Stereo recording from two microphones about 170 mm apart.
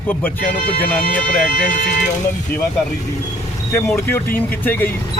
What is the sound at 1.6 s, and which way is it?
Speech, 50° left (ahead or behind).